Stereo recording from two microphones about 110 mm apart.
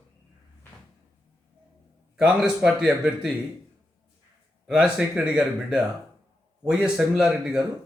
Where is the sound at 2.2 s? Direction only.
5° right (ahead or behind).